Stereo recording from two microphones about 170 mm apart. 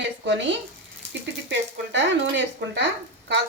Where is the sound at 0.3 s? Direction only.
90° right.